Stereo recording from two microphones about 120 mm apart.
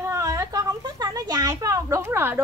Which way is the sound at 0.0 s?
25° right (ahead or behind).